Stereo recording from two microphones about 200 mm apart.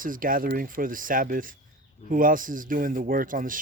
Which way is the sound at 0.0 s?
45° right (ahead or behind).